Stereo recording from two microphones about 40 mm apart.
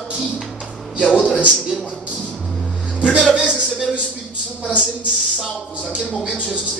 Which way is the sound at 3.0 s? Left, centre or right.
Right.